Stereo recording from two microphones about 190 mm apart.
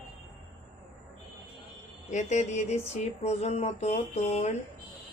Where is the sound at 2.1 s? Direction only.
40° left (ahead or behind).